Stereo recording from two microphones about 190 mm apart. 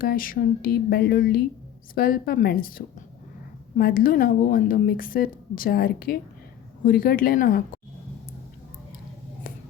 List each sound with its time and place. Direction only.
0.0 s a woman's voice: 50° left (ahead or behind)